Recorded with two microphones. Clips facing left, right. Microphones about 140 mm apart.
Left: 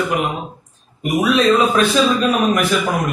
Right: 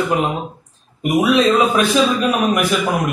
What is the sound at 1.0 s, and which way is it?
Speech, 20° right (ahead or behind).